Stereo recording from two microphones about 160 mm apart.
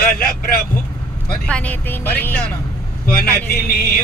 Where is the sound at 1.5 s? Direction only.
5° left (ahead or behind).